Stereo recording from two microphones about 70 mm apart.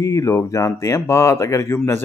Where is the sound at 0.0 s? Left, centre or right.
Left.